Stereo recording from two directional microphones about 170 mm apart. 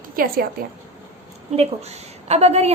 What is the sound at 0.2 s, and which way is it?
Speech, 55° right (ahead or behind).